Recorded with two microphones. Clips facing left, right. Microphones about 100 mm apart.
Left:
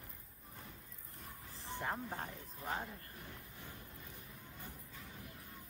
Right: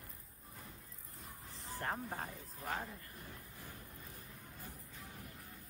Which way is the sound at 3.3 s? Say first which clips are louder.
Even; 20° left (ahead or behind).